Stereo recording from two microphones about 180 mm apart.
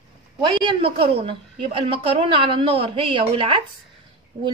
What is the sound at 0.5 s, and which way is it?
A woman's voice, 25° right (ahead or behind).